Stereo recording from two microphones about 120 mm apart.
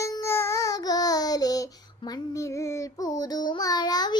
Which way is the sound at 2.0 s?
45° left (ahead or behind).